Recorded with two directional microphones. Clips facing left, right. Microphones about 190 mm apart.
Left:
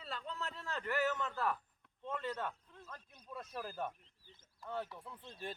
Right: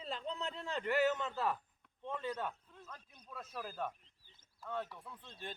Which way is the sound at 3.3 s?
Centre (ahead or behind).